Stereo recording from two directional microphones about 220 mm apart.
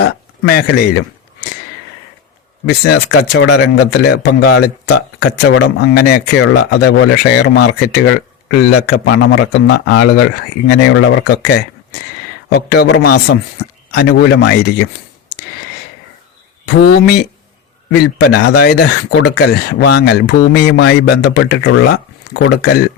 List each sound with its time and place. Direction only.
2.6 s speech: 50° left (ahead or behind)
16.6 s speech: 45° left (ahead or behind)